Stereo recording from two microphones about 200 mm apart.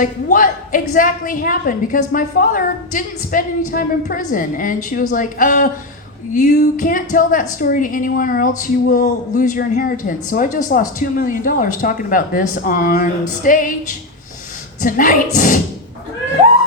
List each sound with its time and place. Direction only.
0.0 s a woman's voice: 40° left (ahead or behind)
14.8 s a woman's voice: 40° left (ahead or behind)